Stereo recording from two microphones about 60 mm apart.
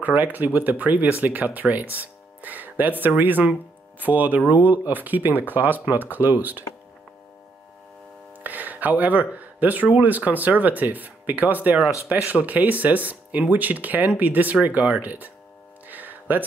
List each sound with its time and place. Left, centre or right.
0.0 s speech: right
8.5 s speech: right
15.9 s music: right